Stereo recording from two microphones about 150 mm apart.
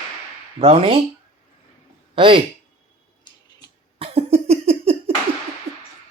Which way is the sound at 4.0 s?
40° right (ahead or behind).